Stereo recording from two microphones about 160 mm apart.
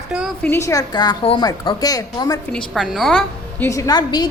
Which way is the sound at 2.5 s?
Centre (ahead or behind).